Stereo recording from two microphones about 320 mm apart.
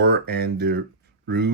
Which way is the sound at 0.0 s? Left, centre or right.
Right.